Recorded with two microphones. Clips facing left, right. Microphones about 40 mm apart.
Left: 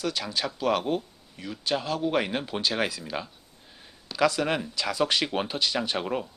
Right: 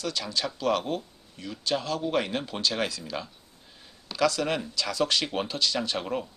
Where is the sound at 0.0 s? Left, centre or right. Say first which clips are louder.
Left 1 dB; centre.